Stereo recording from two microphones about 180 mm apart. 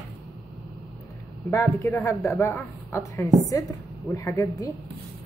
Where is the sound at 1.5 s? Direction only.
15° left (ahead or behind).